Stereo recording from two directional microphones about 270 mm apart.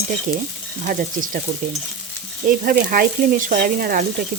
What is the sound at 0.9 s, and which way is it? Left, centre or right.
Speech, right.